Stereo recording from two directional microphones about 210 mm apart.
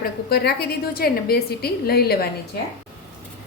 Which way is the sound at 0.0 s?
50° left (ahead or behind).